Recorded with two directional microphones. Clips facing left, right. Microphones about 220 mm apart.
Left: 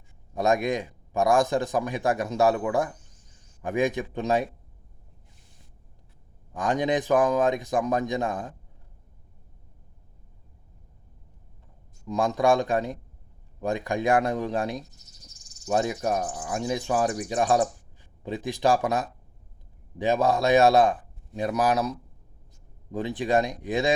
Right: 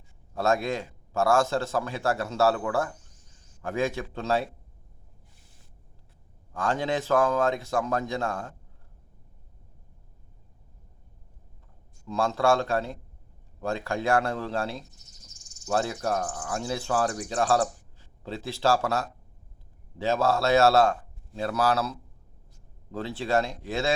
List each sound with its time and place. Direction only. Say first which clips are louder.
0.3 s speech: left 2 dB; 15° left (ahead or behind)
6.5 s speech: left 3 dB; 15° left (ahead or behind)
12.0 s speech: left 2 dB; 15° left (ahead or behind)